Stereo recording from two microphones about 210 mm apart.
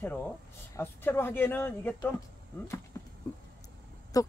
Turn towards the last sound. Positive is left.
turn(degrees=15)  # may be behind; listen again after turning